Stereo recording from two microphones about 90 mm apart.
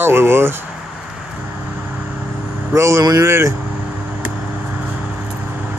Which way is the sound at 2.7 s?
35° right (ahead or behind).